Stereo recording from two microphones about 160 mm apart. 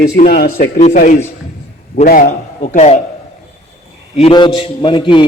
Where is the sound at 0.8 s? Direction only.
50° left (ahead or behind).